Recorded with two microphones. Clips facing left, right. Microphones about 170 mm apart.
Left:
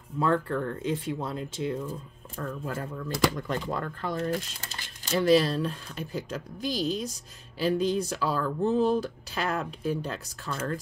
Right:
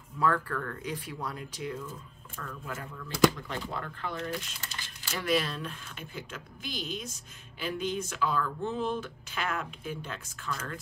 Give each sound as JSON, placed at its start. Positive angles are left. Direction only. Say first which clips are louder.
{"t": 0.2, "sound": "speech", "louder": "left 3 dB", "side_deg": 25}